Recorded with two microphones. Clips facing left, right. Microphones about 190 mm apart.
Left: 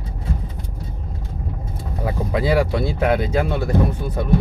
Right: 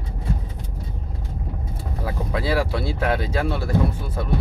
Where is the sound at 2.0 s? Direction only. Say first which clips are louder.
Left 5 dB; 15° left (ahead or behind).